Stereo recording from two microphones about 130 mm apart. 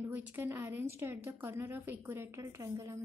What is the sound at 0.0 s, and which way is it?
A woman's voice, 15° right (ahead or behind).